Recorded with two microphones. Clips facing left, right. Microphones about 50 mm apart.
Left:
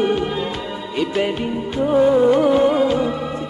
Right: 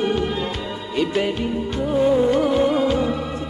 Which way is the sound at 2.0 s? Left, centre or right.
Left.